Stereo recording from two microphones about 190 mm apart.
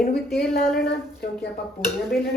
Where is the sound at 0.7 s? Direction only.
55° left (ahead or behind).